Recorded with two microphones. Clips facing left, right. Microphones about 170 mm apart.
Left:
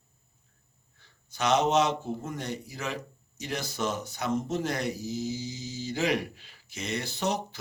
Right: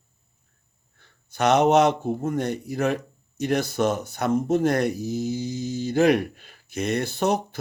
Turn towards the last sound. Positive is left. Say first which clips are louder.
# right 7 dB
turn(degrees=-55)  # may be behind; listen again after turning